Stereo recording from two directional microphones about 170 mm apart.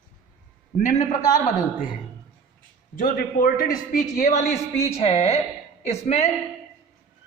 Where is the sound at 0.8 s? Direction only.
45° left (ahead or behind).